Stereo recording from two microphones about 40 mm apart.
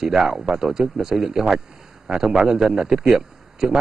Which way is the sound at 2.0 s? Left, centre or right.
Right.